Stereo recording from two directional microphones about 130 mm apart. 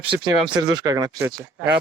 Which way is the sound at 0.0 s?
40° right (ahead or behind).